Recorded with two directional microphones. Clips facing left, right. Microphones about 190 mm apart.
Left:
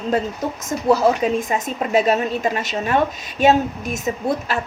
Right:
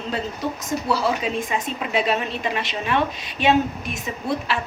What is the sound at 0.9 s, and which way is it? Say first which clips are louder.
A woman's voice: left 8 dB; 45° left (ahead or behind).